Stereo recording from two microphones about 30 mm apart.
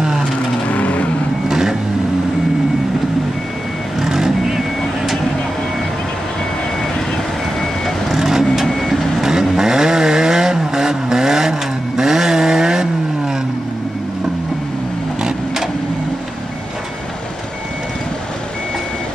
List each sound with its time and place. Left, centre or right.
0.7 s vehicle: left
1.5 s vehicle: centre
4.0 s vehicle: centre
8.1 s vehicle: centre
8.6 s vehicle: centre
9.2 s vehicle: centre